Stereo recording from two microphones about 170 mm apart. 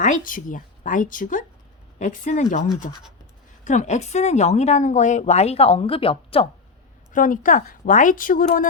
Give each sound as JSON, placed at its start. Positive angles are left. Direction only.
{"t": 0.0, "sound": "a woman's voice", "side_deg": 50}
{"t": 7.1, "sound": "a woman's voice", "side_deg": 50}